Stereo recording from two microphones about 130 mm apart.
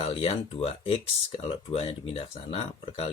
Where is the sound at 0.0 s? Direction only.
45° left (ahead or behind).